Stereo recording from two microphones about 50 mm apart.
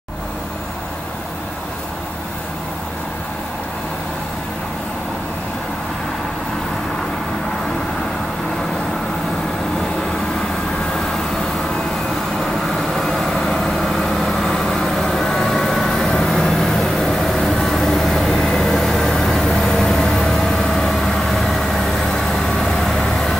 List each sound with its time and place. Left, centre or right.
12.4 s vehicle: centre